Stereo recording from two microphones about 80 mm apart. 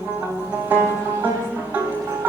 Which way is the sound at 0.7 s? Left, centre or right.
Right.